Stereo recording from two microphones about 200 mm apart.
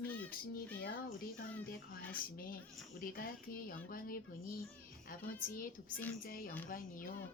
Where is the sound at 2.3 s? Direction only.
45° left (ahead or behind).